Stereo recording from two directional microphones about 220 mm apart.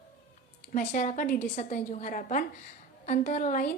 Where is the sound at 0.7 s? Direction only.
35° left (ahead or behind).